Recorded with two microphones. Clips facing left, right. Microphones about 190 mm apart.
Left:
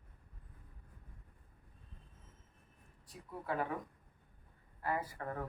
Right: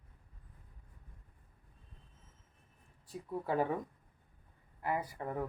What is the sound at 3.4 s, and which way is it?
Speech, 30° right (ahead or behind).